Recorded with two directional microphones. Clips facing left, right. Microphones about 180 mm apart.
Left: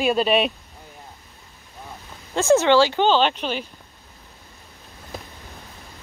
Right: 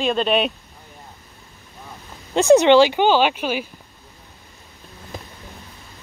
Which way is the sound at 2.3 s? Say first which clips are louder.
Right 4 dB; 20° right (ahead or behind).